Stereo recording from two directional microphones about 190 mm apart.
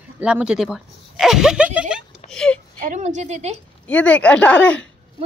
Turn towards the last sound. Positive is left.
turn(degrees=5)  # may be behind; listen again after turning